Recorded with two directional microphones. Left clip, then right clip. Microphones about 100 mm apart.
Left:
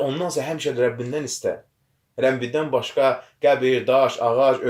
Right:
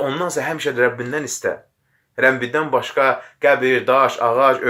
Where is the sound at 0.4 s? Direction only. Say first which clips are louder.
Right 5 dB; 20° left (ahead or behind).